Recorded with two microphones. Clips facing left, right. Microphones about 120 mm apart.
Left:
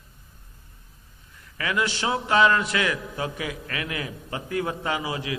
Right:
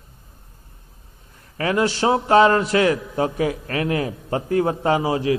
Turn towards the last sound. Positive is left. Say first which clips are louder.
# right 9 dB
turn(degrees=-40)  # may be behind; listen again after turning